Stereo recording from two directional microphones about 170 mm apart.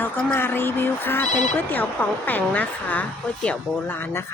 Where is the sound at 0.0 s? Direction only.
10° left (ahead or behind).